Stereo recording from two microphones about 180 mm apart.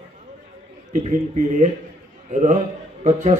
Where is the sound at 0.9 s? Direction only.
45° right (ahead or behind).